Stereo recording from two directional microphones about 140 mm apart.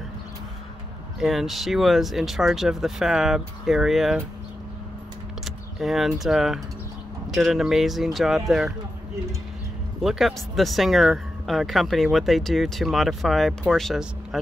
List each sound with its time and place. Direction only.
1.2 s speech: centre (ahead or behind)
5.4 s speech: centre (ahead or behind)
10.0 s speech: centre (ahead or behind)